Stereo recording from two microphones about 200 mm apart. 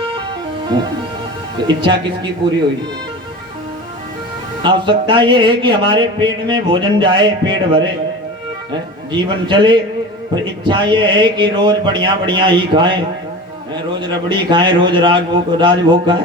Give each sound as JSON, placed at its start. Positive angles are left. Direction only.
{"t": 1.6, "sound": "speech", "side_deg": -25}
{"t": 4.6, "sound": "speech", "side_deg": -25}
{"t": 9.1, "sound": "speech", "side_deg": -25}
{"t": 14.0, "sound": "speech", "side_deg": -20}